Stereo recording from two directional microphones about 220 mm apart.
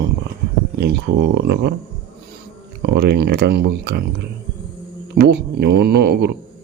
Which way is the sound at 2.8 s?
50° right (ahead or behind).